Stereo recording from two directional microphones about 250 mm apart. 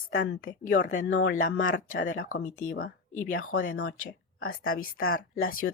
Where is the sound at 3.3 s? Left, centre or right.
Left.